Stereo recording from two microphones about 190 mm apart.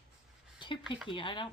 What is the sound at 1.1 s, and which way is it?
Speech, 25° left (ahead or behind).